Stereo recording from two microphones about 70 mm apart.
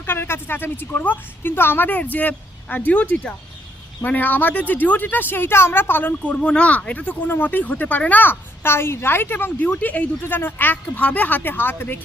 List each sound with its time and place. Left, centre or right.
0.0 s a woman's voice: left
6.3 s a woman's voice: centre; by 11.9 s left